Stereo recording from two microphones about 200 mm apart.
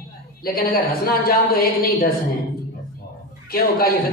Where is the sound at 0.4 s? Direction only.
50° left (ahead or behind).